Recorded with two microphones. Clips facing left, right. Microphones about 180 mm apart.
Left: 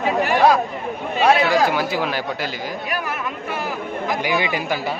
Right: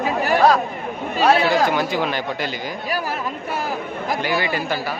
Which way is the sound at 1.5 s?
5° left (ahead or behind).